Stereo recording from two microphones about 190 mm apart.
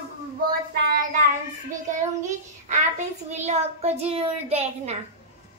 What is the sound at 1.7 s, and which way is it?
A child's voice, 40° right (ahead or behind).